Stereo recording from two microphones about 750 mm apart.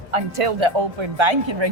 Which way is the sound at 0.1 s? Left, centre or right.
Right.